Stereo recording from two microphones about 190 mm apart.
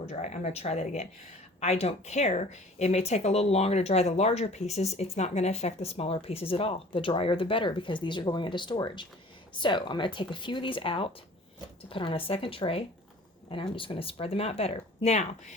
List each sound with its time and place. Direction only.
0.1 s speech: 35° left (ahead or behind)